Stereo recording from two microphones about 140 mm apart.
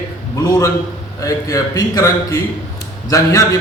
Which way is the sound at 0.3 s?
25° left (ahead or behind).